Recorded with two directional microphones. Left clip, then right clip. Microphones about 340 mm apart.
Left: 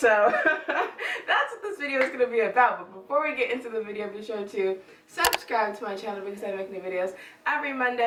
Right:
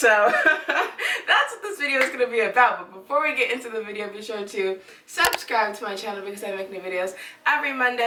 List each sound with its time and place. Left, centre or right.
0.0 s chuckle: centre
3.2 s speech: centre